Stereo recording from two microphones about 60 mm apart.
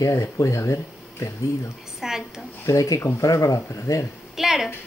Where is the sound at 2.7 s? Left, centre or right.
Left.